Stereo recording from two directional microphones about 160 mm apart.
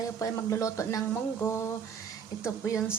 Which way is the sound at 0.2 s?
20° left (ahead or behind).